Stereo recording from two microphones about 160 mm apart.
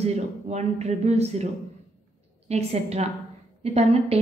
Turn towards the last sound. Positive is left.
turn(degrees=-40)  # may be behind; listen again after turning